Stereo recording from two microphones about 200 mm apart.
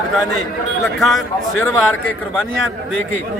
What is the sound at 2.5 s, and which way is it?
Speech, 85° left.